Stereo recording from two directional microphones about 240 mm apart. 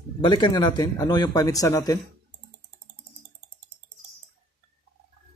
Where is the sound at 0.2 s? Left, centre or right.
Centre.